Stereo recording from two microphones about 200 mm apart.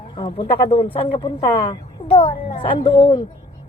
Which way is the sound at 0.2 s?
30° left (ahead or behind).